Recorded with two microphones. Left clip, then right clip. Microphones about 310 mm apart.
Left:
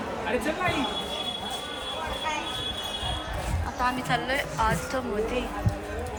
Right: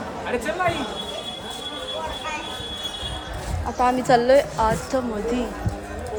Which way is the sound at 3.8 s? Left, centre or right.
Centre.